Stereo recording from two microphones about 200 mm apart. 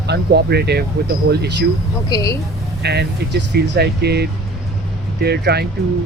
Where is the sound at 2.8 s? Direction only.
55° right (ahead or behind).